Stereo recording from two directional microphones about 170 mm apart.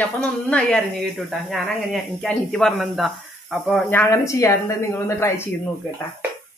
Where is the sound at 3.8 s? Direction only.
15° left (ahead or behind).